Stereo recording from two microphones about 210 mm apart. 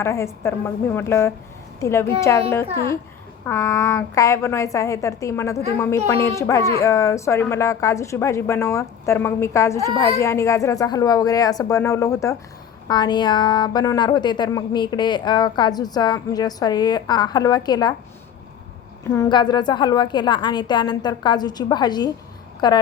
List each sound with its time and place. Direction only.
0.0 s speech: 15° left (ahead or behind)
3.4 s a woman's voice: 15° left (ahead or behind)
19.0 s a woman's voice: 15° left (ahead or behind)